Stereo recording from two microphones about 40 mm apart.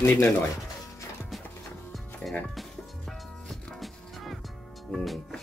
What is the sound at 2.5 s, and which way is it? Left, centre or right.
Music, centre.